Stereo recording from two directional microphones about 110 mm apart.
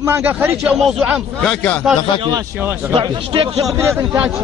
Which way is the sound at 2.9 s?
50° right (ahead or behind).